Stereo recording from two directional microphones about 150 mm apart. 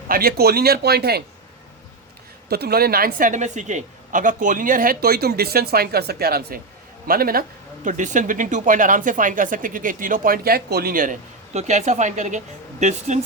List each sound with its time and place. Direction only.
0.1 s speech: 80° right
2.5 s a woman's voice: 90° right
7.1 s a woman's voice: 80° right
7.9 s speech: 55° right (ahead or behind)